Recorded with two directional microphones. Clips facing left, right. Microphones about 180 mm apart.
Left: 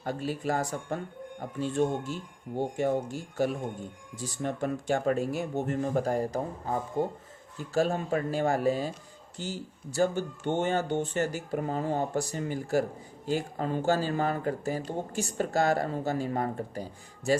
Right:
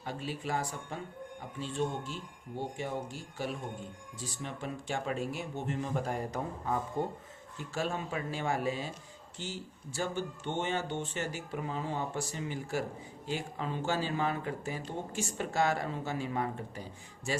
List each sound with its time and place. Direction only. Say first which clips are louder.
0.0 s speech: left 6 dB; 45° left (ahead or behind)